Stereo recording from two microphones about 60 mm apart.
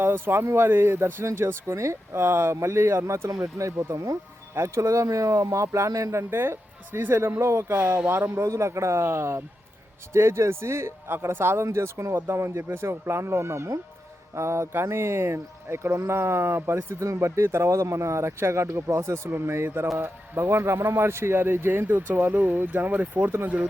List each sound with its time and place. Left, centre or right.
0.0 s speech: right
6.3 s speech: right